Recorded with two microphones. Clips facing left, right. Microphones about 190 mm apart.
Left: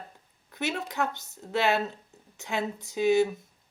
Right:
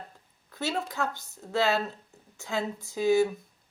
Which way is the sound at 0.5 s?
20° left (ahead or behind).